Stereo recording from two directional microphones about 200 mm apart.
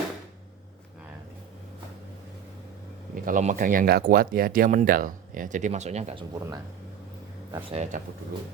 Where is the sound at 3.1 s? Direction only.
40° right (ahead or behind); by 6.6 s 20° right (ahead or behind).